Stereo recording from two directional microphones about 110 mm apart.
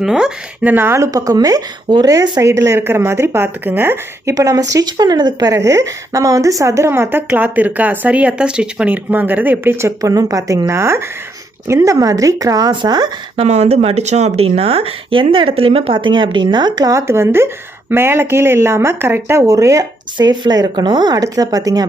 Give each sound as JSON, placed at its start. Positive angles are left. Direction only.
{"t": 0.0, "sound": "speech", "side_deg": -5}
{"t": 2.4, "sound": "speech", "side_deg": -25}
{"t": 4.4, "sound": "speech", "side_deg": -35}
{"t": 13.3, "sound": "speech", "side_deg": -75}
{"t": 17.1, "sound": "speech", "side_deg": -25}